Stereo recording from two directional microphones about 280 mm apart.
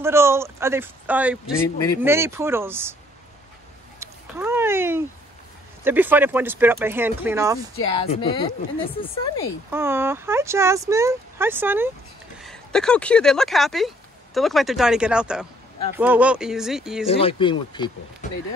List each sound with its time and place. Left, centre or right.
0.0 s speech: centre
1.6 s speech: centre
2.0 s speech: centre
4.0 s a sound: centre
5.9 s speech: centre
7.8 s speech: centre
9.7 s speech: centre
17.0 s speech: centre